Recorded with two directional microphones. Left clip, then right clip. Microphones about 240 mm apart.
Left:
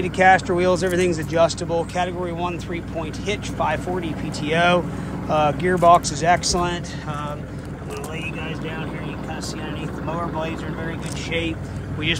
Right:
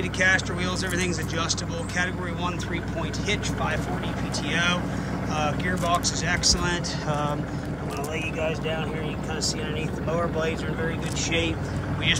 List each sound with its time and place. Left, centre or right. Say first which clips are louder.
0.0 s speech: left 7 dB; centre